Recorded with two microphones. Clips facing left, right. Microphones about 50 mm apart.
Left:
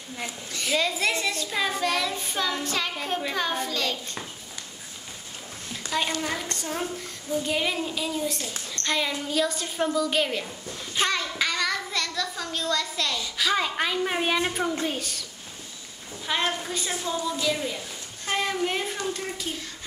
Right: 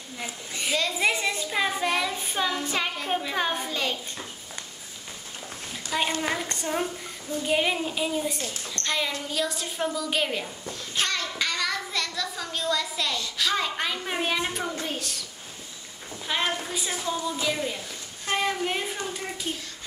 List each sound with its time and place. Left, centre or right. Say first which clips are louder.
0.5 s speech: left 2 dB; centre
5.7 s a sound: even; centre
6.3 s speech: right 2 dB; centre
8.8 s child singing: left 1 dB; centre
9.3 s a child's voice: left 3 dB; centre
10.7 s child singing: left 3 dB; centre
13.2 s a child's voice: left 3 dB; centre
16.3 s a child's voice: left 1 dB; centre
17.7 s a sound: left 1 dB; centre
18.9 s speech: left 2 dB; centre